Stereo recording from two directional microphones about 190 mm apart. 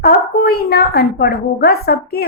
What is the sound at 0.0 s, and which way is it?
A woman's voice, 55° left (ahead or behind).